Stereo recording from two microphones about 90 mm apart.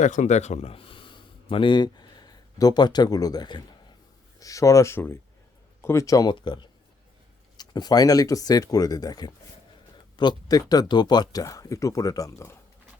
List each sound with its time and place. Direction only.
0.7 s a sound: 85° left; by 3.6 s 50° left (ahead or behind)
4.4 s speech: 40° left (ahead or behind)
6.3 s speech: 60° left (ahead or behind); by 12.5 s 35° left (ahead or behind)